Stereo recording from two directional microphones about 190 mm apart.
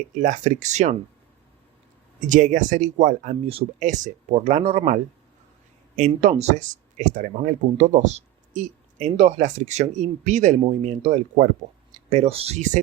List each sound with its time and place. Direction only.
0.2 s speech: 40° right (ahead or behind)
2.2 s speech: 45° right (ahead or behind)
6.0 s speech: 35° right (ahead or behind)